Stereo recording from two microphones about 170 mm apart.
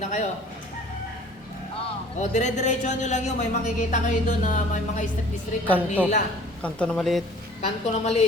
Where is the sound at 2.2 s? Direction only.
45° left (ahead or behind).